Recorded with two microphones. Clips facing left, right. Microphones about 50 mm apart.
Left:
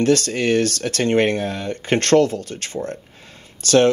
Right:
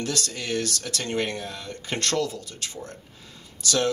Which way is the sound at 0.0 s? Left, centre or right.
Left.